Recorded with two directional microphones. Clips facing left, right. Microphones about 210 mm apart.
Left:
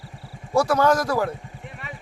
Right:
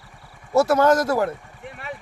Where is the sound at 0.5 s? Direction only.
25° right (ahead or behind).